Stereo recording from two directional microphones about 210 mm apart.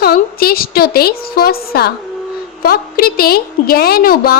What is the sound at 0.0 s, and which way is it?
A woman's voice, 45° left (ahead or behind).